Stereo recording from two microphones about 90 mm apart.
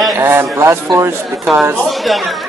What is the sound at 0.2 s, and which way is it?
Speech, 25° right (ahead or behind).